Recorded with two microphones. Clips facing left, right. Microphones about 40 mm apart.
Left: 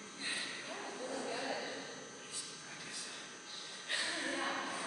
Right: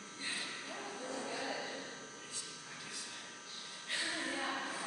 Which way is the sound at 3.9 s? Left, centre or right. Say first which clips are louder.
Even; centre.